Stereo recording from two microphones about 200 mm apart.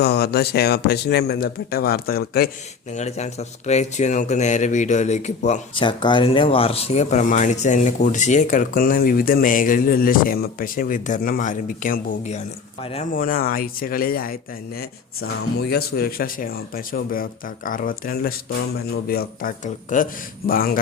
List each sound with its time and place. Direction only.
0.0 s speech: 55° left (ahead or behind)
2.9 s speech: 35° left (ahead or behind)
5.8 s speech: 25° left (ahead or behind)
13.1 s speech: 45° left (ahead or behind)
15.7 s speech: 50° left (ahead or behind)